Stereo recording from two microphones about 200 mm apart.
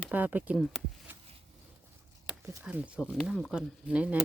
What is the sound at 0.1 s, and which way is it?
Speech, 10° right (ahead or behind).